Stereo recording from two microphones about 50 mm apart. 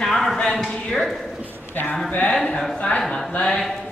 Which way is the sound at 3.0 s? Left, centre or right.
Centre.